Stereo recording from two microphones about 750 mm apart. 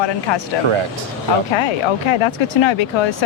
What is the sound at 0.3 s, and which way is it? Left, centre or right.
Speech, left.